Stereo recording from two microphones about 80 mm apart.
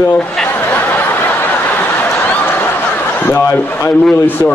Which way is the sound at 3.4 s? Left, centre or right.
Left.